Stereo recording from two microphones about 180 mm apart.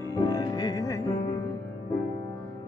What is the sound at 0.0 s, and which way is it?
Music, 20° left (ahead or behind).